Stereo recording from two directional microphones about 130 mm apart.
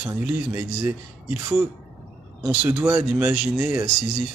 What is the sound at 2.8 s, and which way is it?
Speech, 10° right (ahead or behind).